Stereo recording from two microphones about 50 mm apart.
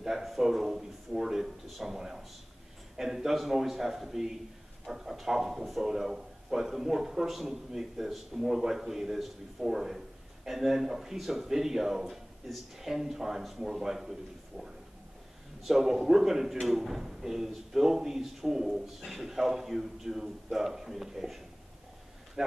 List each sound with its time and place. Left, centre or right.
0.0 s a man's voice: centre
15.6 s speech: centre